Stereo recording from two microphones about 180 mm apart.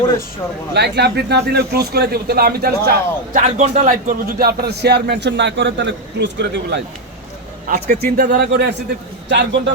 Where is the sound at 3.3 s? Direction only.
40° right (ahead or behind); by 6.8 s 70° right (ahead or behind).